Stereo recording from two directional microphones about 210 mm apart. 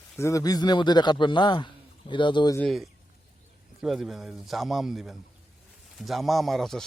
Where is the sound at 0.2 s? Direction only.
15° left (ahead or behind).